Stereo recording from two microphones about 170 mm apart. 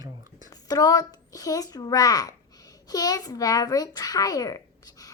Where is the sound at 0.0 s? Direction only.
20° right (ahead or behind).